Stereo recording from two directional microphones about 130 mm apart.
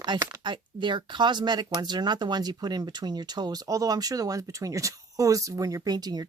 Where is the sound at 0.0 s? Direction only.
30° right (ahead or behind).